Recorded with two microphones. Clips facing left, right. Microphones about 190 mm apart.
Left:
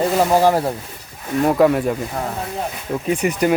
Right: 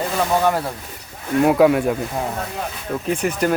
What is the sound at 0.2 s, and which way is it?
Speech, 30° left (ahead or behind).